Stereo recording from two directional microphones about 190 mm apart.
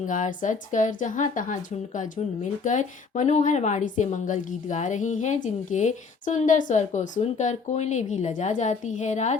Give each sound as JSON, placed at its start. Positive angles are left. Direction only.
{"t": 0.1, "sound": "speech", "side_deg": 40}